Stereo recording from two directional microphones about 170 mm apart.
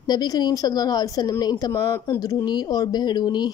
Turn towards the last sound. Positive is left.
turn(degrees=25)  # may be behind; listen again after turning